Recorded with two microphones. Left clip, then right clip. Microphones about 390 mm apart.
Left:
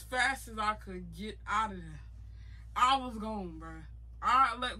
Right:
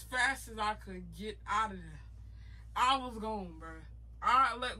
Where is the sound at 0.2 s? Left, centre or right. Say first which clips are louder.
Left 1 dB; centre.